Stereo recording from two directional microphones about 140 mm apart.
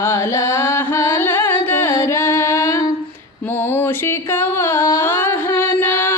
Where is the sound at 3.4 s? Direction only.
15° left (ahead or behind).